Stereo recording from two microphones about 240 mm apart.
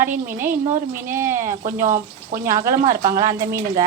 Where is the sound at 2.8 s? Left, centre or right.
Right.